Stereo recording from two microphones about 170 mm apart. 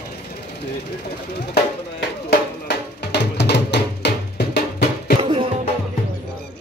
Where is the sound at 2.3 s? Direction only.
80° left.